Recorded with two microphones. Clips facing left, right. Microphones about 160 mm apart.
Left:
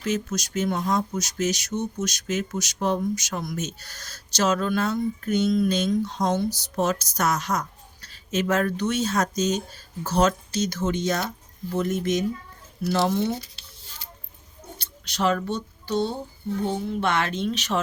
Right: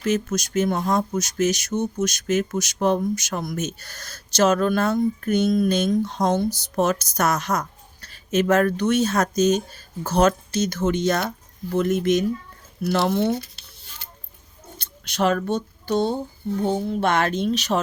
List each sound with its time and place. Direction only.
0.0 s speech: 50° right (ahead or behind)
12.8 s a sound: 60° right (ahead or behind)
14.8 s speech: 50° right (ahead or behind)